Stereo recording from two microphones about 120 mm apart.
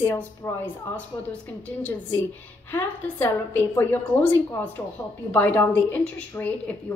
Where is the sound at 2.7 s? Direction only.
15° left (ahead or behind).